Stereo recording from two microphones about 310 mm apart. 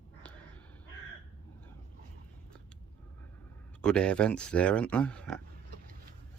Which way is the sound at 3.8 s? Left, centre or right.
Centre.